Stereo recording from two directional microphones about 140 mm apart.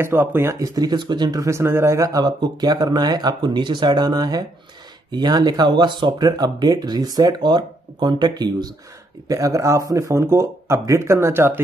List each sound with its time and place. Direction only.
0.0 s speech: 15° right (ahead or behind)